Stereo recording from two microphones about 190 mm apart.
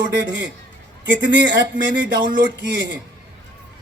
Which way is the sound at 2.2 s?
45° right (ahead or behind).